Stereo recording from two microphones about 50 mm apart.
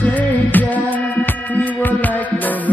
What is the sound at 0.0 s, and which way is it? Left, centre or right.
Music, left.